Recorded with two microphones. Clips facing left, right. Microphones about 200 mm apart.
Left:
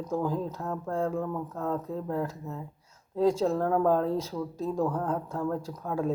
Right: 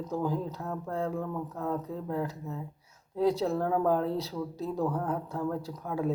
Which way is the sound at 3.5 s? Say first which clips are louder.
Left 2 dB; 45° left (ahead or behind).